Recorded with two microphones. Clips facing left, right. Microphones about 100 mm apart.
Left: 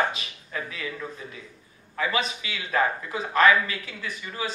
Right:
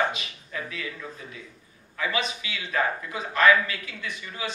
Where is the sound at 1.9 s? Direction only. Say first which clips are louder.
Left 2 dB; 35° left (ahead or behind).